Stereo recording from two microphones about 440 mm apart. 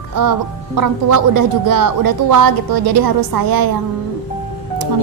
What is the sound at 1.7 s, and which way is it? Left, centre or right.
A woman's voice, right.